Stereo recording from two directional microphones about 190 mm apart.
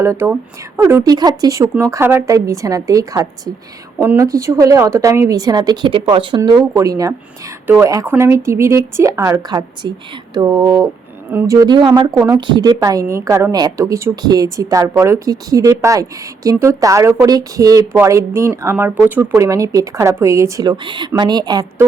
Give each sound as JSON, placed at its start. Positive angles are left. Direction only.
{"t": 0.0, "sound": "a woman's voice", "side_deg": -15}